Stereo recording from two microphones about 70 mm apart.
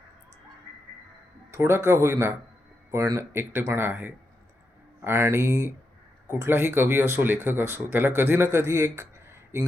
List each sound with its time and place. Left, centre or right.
1.5 s speech: right